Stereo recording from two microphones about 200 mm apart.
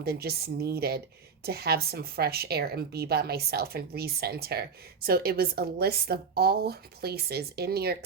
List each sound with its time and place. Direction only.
0.0 s a woman's voice: 50° right (ahead or behind)